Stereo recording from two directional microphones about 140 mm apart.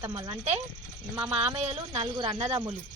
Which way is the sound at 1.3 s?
45° right (ahead or behind).